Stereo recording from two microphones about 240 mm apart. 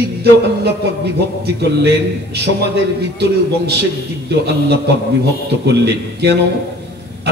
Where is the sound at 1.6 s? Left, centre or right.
Right.